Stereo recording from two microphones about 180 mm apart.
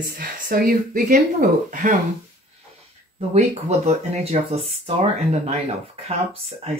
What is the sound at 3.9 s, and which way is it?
Speech, 35° right (ahead or behind).